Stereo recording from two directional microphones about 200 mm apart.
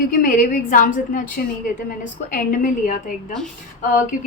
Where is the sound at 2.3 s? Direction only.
45° left (ahead or behind).